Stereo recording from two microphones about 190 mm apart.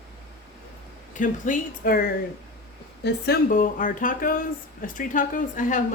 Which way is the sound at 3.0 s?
50° left (ahead or behind).